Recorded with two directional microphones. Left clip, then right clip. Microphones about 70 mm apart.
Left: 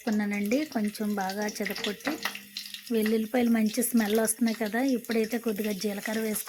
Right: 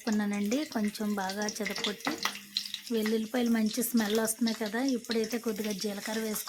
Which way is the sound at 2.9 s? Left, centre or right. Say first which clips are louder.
Left 4 dB; left.